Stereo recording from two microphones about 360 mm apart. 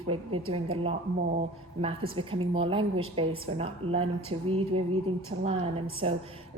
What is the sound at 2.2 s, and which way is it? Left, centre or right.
A woman's voice, centre.